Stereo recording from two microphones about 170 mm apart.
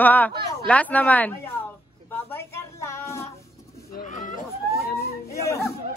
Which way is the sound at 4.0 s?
50° left (ahead or behind).